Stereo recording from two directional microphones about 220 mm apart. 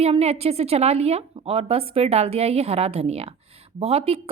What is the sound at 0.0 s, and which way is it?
A woman's voice, 30° right (ahead or behind).